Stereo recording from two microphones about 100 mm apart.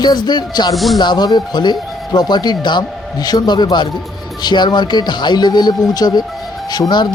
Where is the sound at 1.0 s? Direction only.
45° left (ahead or behind).